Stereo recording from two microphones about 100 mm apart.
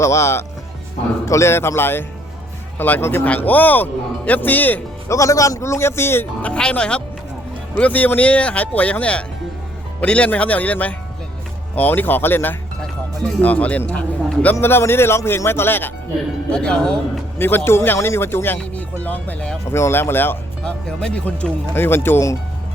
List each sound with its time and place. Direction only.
0.0 s speech: 30° left (ahead or behind)
5.0 s speech: 30° left (ahead or behind)
6.4 s speech: 10° left (ahead or behind)
16.5 s speech: 10° left (ahead or behind)
17.3 s speech: 20° left (ahead or behind)
19.7 s speech: 25° left (ahead or behind)
20.7 s speech: 10° left (ahead or behind)
21.8 s speech: 20° left (ahead or behind)